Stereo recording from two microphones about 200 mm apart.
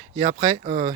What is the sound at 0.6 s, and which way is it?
Speech, 30° right (ahead or behind).